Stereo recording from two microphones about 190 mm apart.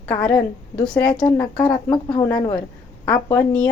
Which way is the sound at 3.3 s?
5° left (ahead or behind).